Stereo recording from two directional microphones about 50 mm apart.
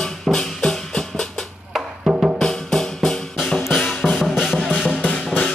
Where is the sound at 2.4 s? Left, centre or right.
Centre.